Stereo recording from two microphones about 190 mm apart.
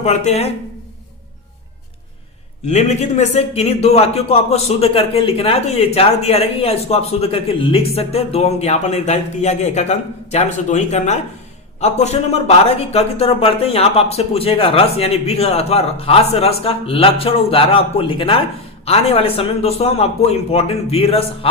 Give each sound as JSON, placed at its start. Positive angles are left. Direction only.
{"t": 0.0, "sound": "a man's voice", "side_deg": 35}
{"t": 2.6, "sound": "a man's voice", "side_deg": 35}